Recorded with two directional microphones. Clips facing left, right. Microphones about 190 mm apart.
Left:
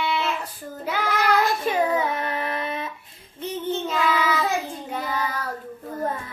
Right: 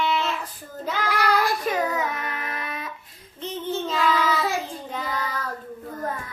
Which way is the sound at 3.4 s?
10° left (ahead or behind).